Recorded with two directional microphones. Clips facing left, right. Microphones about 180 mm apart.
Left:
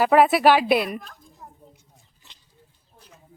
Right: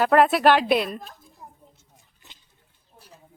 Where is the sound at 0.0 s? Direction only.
5° left (ahead or behind).